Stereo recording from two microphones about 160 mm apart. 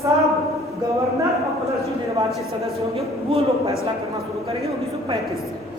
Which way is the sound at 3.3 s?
40° right (ahead or behind).